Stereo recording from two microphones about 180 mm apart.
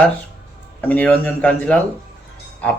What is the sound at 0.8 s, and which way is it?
Speech, 10° left (ahead or behind).